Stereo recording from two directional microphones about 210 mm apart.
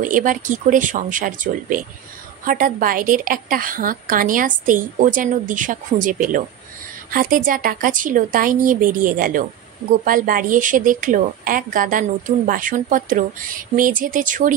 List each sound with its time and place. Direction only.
0.0 s a woman's voice: 40° right (ahead or behind)